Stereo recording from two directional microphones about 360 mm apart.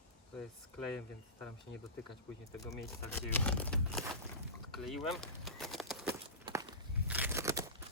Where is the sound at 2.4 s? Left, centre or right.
Centre.